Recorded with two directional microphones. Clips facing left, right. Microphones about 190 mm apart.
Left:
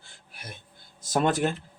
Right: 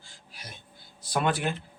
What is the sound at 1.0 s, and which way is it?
Speech, 45° left (ahead or behind).